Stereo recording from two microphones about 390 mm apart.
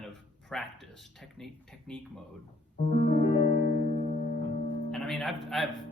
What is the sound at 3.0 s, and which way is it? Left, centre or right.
Music, centre.